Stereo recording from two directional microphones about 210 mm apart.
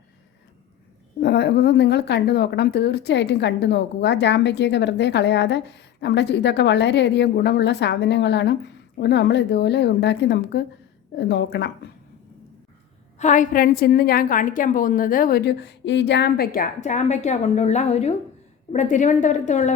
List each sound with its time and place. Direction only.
1.2 s speech: 50° left (ahead or behind)
13.1 s a woman's voice: 35° left (ahead or behind)